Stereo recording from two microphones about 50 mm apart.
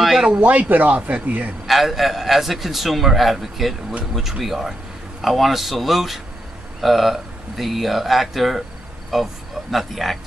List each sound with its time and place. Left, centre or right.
0.0 s a sound: centre
0.4 s speech: right
1.7 s a man's voice: centre